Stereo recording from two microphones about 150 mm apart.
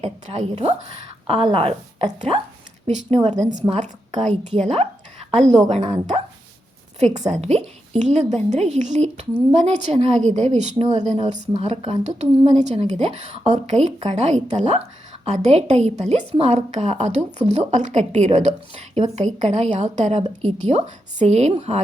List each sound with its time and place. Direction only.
0.0 s a woman's voice: 45° right (ahead or behind)
2.8 s a woman's voice: 50° right (ahead or behind)